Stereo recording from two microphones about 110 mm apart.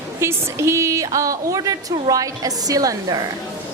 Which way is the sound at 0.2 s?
25° right (ahead or behind).